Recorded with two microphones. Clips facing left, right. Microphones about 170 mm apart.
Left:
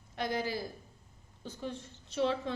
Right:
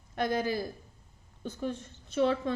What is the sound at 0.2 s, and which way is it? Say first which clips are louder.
A woman's voice: right 4 dB; 50° right (ahead or behind).